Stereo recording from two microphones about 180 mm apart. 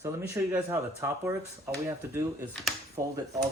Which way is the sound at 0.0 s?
15° right (ahead or behind).